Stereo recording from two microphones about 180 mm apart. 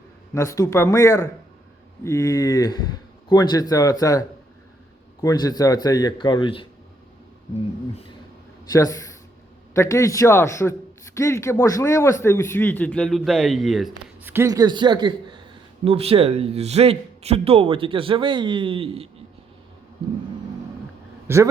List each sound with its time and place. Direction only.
0.3 s a man's voice: 15° left (ahead or behind)
8.7 s a man's voice: 20° left (ahead or behind); by 13.9 s centre (ahead or behind)
14.3 s a man's voice: 15° right (ahead or behind)
21.3 s a man's voice: 15° right (ahead or behind)